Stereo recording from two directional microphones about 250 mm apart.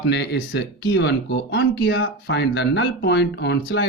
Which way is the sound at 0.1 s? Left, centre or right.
Left.